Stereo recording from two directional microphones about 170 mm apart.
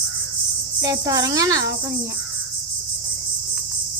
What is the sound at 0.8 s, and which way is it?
Cricket, 20° right (ahead or behind).